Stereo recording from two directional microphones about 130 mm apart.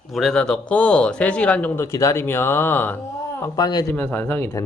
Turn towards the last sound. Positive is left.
turn(degrees=15)  # may be behind; listen again after turning